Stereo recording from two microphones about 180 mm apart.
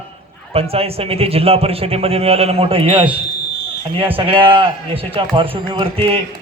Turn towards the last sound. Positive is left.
turn(degrees=-30)  # may be behind; listen again after turning